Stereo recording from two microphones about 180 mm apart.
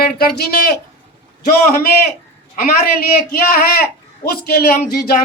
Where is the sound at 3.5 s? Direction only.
55° left (ahead or behind).